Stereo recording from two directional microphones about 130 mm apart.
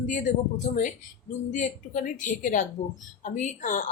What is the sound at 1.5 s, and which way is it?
A woman's voice, 75° left (ahead or behind).